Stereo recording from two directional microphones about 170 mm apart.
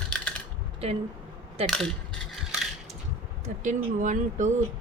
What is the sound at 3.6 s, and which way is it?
Speech, 45° right (ahead or behind).